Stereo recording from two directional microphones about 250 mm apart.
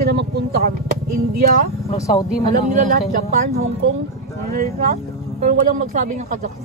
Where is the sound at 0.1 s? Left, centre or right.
Right.